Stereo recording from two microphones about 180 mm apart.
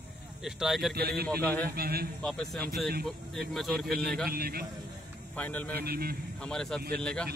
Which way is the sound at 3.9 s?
60° right (ahead or behind).